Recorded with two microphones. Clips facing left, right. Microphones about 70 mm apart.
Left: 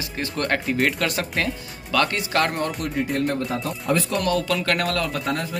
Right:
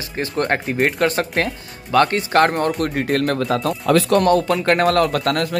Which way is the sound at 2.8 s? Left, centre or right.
Right.